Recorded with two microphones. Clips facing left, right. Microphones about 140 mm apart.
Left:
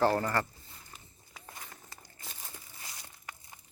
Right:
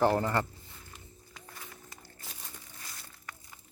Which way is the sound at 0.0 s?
15° right (ahead or behind).